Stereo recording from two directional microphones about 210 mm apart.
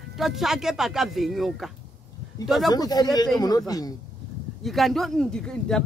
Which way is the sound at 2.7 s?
20° left (ahead or behind).